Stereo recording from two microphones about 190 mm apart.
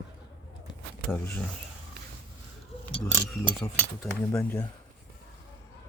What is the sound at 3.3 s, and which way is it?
Speech, 10° left (ahead or behind).